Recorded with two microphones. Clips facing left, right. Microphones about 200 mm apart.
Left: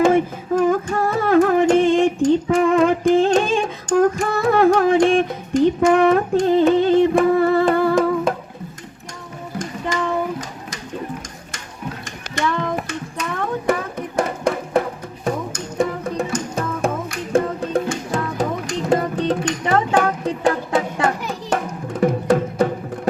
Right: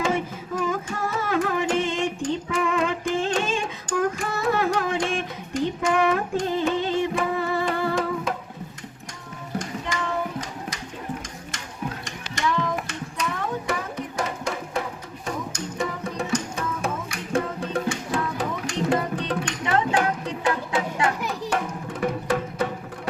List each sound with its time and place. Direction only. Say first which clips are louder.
0.0 s music: left 10 dB; 55° left (ahead or behind)
9.6 s child singing: left 5 dB; 50° left (ahead or behind)
12.4 s child singing: left 3 dB; 50° left (ahead or behind)
12.9 s music: left 3 dB; 55° left (ahead or behind)